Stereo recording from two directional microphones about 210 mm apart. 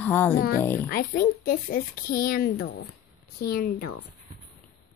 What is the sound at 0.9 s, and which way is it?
A woman's voice, 45° left (ahead or behind).